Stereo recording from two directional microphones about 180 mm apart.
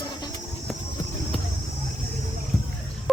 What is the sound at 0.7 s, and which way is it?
Clip-clop, centre (ahead or behind).